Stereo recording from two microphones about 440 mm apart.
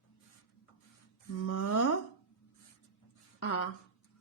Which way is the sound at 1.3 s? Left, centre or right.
Left.